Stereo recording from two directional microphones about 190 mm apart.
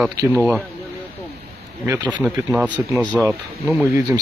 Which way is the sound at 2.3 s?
5° right (ahead or behind).